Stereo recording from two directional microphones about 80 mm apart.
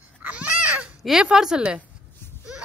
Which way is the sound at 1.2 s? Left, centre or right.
Centre.